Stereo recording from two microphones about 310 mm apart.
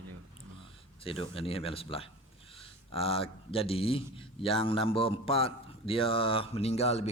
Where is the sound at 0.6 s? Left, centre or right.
Centre.